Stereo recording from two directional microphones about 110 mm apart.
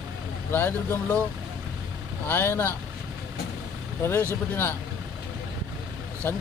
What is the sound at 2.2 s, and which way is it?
Speech, 20° left (ahead or behind).